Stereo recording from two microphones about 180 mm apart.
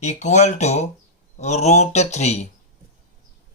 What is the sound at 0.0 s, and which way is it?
Speech, 40° left (ahead or behind).